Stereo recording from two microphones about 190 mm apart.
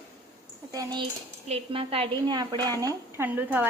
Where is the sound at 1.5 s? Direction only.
30° right (ahead or behind).